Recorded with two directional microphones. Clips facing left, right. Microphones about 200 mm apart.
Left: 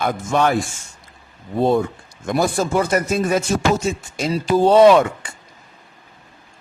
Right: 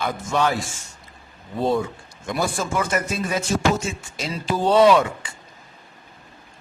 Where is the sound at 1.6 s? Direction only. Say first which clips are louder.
Left 5 dB; 55° left (ahead or behind).